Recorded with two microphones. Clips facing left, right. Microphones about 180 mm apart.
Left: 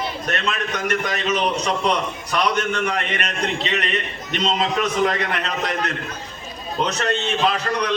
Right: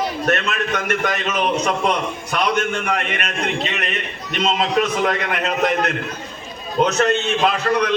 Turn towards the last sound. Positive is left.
turn(degrees=-50)  # may be behind; listen again after turning